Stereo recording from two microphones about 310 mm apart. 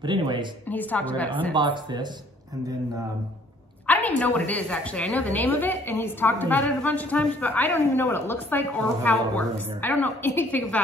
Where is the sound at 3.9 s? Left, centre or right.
Centre.